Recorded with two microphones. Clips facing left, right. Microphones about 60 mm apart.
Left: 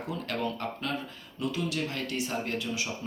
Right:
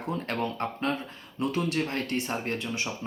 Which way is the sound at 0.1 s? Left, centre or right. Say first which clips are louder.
Right 3 dB; right.